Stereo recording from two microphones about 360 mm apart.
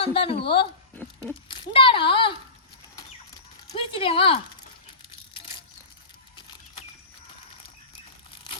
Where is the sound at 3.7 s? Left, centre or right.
Centre.